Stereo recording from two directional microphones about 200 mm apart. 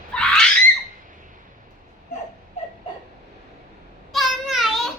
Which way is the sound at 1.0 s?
40° right (ahead or behind).